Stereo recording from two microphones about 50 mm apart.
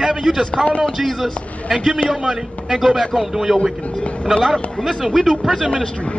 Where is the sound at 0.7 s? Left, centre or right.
Left.